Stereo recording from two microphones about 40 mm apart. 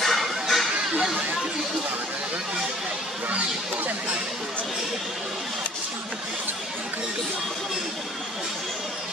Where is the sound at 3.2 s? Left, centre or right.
Right.